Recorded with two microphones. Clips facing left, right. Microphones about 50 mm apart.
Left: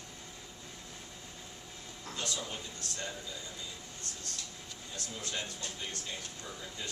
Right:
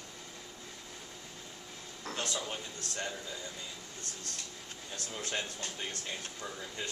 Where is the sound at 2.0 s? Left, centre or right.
Right.